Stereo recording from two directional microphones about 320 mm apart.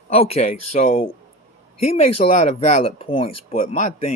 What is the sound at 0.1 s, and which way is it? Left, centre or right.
Speech, centre.